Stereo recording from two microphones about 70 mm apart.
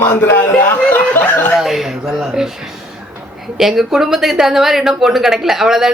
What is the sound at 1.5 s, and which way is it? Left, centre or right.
Speech, centre.